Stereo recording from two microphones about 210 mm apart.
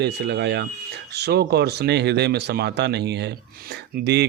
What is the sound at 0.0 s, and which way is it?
Speech, 55° right (ahead or behind).